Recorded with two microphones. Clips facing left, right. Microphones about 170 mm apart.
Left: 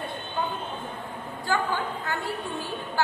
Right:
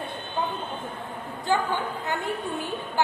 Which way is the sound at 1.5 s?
20° right (ahead or behind).